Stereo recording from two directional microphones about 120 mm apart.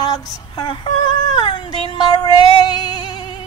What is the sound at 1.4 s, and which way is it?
Music, 40° left (ahead or behind).